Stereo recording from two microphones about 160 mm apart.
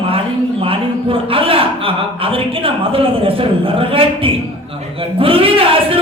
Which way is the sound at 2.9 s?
35° right (ahead or behind).